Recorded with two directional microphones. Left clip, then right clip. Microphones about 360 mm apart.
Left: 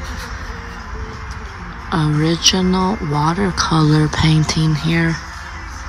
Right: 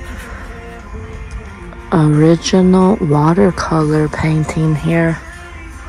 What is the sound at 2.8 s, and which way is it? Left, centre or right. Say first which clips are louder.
Speech: right 6 dB; right.